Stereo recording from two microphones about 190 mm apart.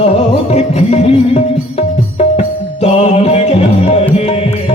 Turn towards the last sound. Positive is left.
turn(degrees=35)  # may be behind; listen again after turning